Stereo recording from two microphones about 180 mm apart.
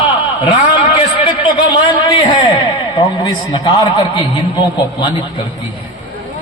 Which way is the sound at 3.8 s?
30° left (ahead or behind).